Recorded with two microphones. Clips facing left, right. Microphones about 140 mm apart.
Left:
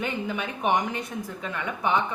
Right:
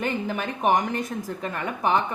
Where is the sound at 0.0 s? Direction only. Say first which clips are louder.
Right 2 dB; 45° right (ahead or behind).